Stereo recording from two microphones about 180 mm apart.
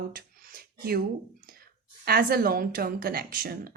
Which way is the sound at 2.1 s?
55° right (ahead or behind).